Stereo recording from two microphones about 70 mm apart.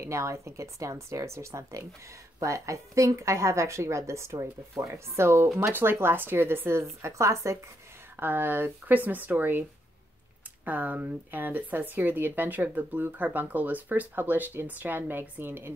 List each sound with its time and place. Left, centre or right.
0.0 s a woman's voice: right
8.2 s speech: right